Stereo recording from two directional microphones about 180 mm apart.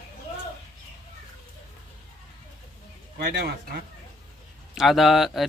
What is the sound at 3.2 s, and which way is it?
Speech, 65° right (ahead or behind).